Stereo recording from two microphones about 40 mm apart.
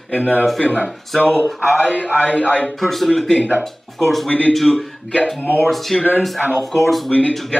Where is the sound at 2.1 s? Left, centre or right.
Right.